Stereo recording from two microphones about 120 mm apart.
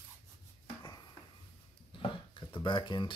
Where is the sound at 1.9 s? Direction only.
45° left (ahead or behind).